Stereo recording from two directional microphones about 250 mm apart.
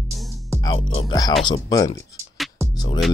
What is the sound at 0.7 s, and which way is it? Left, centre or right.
Speech, left.